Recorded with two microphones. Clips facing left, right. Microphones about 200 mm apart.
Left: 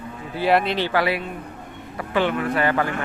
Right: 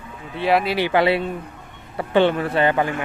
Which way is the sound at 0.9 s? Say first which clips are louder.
Right 4 dB; 25° right (ahead or behind).